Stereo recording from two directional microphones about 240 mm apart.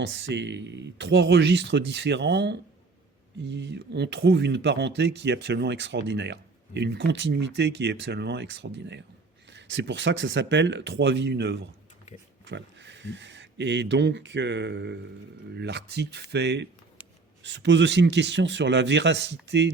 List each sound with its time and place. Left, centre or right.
0.0 s speech: right